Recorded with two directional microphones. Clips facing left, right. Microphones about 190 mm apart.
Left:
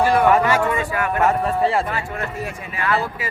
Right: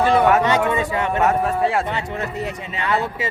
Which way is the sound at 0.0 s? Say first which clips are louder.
Right 1 dB; 20° right (ahead or behind).